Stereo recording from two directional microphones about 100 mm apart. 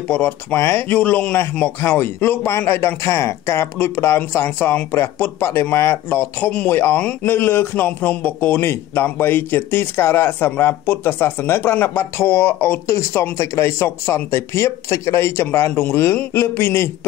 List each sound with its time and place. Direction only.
0.1 s a man's voice: 15° left (ahead or behind)